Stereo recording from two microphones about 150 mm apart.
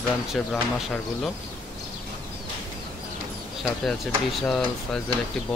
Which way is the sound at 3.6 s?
Centre (ahead or behind).